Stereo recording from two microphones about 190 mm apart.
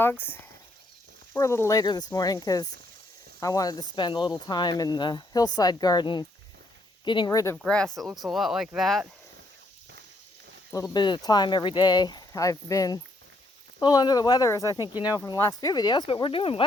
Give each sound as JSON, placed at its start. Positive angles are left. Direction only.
{"t": 0.0, "sound": "speech", "side_deg": 10}
{"t": 7.5, "sound": "speech", "side_deg": 5}
{"t": 10.9, "sound": "speech", "side_deg": 25}